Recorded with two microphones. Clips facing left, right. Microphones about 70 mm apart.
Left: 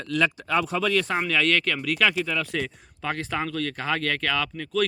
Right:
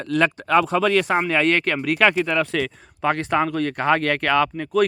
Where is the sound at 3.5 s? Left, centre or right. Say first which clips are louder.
Right 7 dB; right.